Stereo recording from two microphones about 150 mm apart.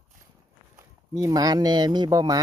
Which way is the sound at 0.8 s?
20° right (ahead or behind).